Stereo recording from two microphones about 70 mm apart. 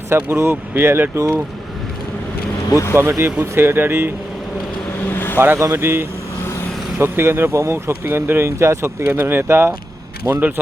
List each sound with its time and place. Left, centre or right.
0.1 s speech: right
2.6 s speech: left
2.9 s speech: right
5.1 s vehicle: left
5.4 s speech: right
10.3 s a man's voice: right